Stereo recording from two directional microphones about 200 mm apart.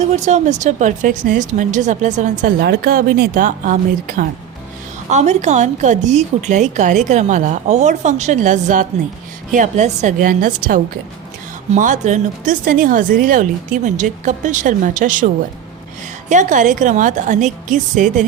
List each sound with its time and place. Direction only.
0.3 s a woman's voice: 35° right (ahead or behind)
2.4 s a woman's voice: 50° right (ahead or behind)
16.3 s a woman's voice: 40° right (ahead or behind)